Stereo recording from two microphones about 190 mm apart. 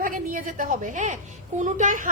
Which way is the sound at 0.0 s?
45° right (ahead or behind).